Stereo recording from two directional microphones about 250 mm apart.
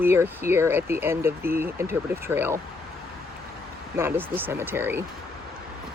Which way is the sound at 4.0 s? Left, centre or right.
Centre.